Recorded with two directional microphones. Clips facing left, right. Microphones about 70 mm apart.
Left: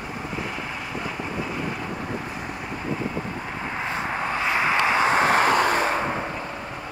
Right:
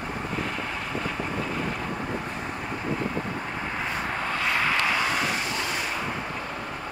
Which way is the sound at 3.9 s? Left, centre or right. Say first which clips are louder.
Left 4 dB; centre.